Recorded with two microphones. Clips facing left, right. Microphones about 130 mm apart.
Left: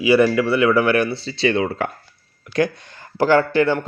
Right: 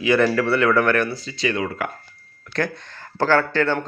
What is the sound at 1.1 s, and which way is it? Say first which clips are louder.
Speech: left 5 dB; 30° left (ahead or behind).